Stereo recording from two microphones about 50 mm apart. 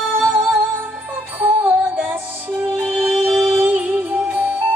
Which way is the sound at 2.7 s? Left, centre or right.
Right.